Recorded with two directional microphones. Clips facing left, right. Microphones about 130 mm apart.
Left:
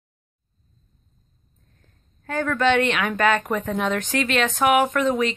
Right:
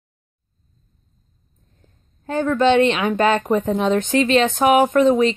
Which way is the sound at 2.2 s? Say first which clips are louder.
Right 4 dB; 25° right (ahead or behind).